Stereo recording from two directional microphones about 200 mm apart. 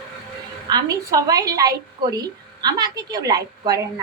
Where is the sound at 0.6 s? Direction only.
20° right (ahead or behind).